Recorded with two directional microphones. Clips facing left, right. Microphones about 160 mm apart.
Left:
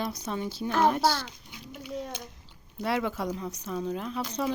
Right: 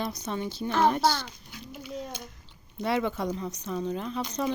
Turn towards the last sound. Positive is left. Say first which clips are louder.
# right 1 dB
turn(degrees=5)  # may be behind; listen again after turning